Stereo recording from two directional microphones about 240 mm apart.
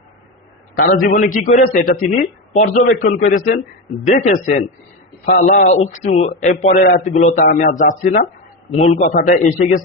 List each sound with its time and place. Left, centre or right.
1.0 s speech: left